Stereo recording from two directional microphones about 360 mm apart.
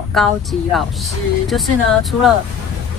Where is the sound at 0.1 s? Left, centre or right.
Centre.